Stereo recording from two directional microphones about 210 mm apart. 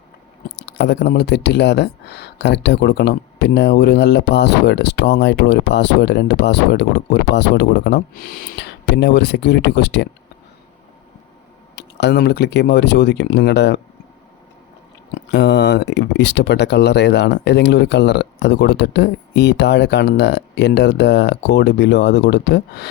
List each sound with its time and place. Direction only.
0.5 s speech: 50° left (ahead or behind)
11.8 s speech: 55° left (ahead or behind)
15.3 s speech: 55° left (ahead or behind)